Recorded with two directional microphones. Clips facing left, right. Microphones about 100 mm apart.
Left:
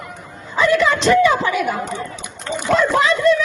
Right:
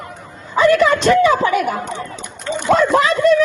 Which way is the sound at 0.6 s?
45° right (ahead or behind).